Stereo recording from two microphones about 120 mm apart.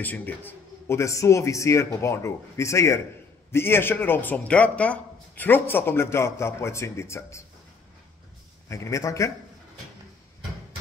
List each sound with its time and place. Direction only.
0.0 s speech: 15° left (ahead or behind)
8.6 s speech: 25° left (ahead or behind)